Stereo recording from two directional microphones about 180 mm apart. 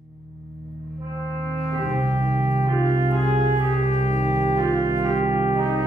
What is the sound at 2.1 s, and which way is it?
Organ, 15° right (ahead or behind).